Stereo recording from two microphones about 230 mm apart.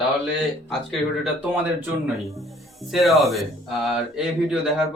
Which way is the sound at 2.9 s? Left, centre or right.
Centre.